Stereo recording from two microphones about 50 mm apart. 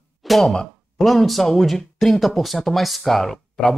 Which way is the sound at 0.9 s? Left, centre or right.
Centre.